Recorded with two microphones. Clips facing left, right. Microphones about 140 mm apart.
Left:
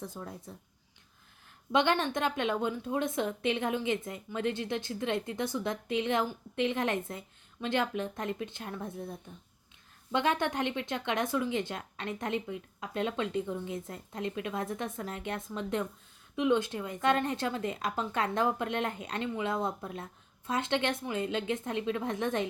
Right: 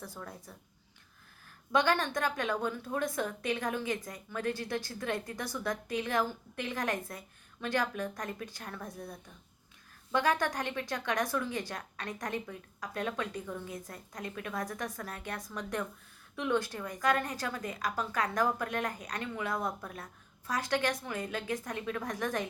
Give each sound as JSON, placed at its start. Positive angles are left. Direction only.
{"t": 0.0, "sound": "a woman's voice", "side_deg": 20}
{"t": 1.7, "sound": "a woman's voice", "side_deg": 20}